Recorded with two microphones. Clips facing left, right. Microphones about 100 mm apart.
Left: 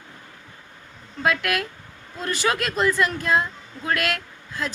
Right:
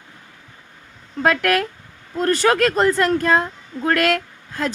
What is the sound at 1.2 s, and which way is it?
Speech, 45° right (ahead or behind).